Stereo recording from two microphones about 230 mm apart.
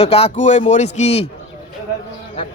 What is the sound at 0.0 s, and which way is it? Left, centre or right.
Speech, left.